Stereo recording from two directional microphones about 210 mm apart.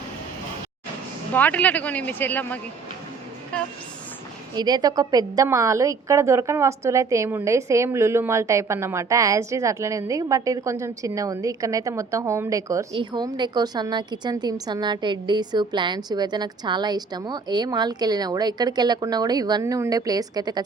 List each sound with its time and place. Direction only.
1.3 s a woman's voice: 10° left (ahead or behind)
4.5 s a woman's voice: 20° right (ahead or behind)